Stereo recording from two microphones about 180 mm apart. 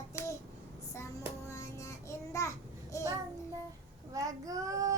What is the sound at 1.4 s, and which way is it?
Child singing, 15° left (ahead or behind).